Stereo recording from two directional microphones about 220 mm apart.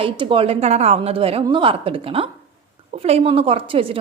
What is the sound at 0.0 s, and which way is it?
A woman's voice, 25° right (ahead or behind).